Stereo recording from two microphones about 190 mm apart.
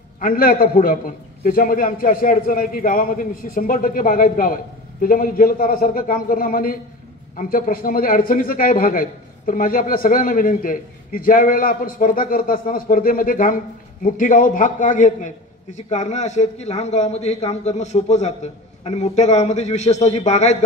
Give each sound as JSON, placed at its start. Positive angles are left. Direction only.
{"t": 0.2, "sound": "a man's voice", "side_deg": 50}